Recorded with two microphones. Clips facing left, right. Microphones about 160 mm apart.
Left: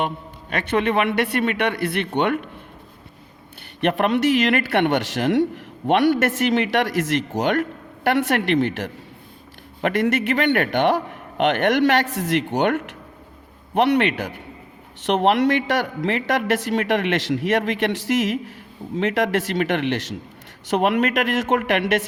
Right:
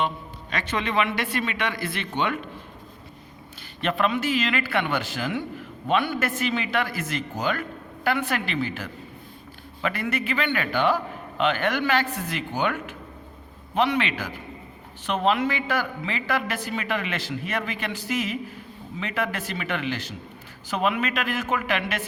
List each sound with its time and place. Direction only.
0.5 s speech: 60° left (ahead or behind)
3.8 s a man's voice: 70° left (ahead or behind)
15.0 s a man's voice: 75° left (ahead or behind)